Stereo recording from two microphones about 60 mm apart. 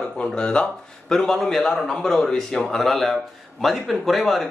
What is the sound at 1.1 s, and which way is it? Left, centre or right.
Speech, centre.